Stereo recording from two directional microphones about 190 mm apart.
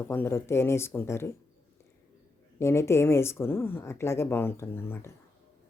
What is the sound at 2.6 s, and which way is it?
Speech, 15° left (ahead or behind).